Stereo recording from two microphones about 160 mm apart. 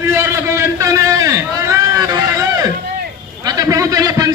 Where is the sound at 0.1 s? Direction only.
15° right (ahead or behind).